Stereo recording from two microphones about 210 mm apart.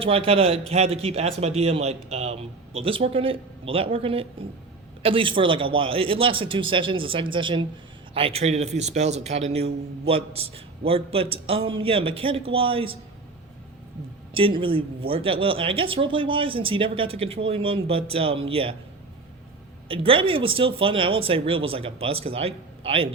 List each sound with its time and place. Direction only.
0.0 s a man's voice: 25° right (ahead or behind)
14.3 s speech: 25° right (ahead or behind)
19.9 s speech: 25° right (ahead or behind)